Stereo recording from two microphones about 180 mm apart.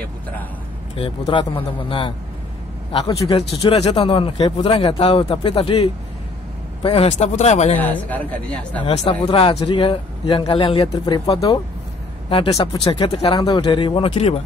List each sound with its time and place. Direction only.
0.9 s a man's voice: 30° left (ahead or behind)
7.8 s speech: 10° left (ahead or behind)
8.8 s a man's voice: 30° left (ahead or behind)